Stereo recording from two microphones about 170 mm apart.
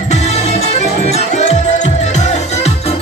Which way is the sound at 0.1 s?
40° left (ahead or behind).